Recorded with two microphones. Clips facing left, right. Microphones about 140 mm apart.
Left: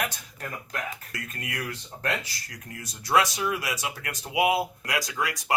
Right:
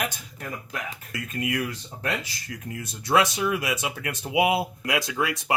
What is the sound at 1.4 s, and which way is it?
Speech, 20° right (ahead or behind).